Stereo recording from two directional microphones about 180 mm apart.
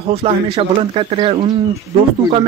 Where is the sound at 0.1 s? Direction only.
30° right (ahead or behind).